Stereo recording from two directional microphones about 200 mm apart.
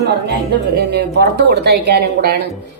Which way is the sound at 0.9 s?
55° right (ahead or behind).